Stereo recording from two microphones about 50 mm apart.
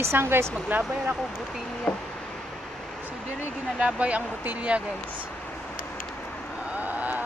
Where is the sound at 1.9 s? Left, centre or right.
Centre.